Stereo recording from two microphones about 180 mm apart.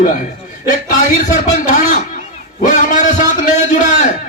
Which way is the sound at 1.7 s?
45° left (ahead or behind).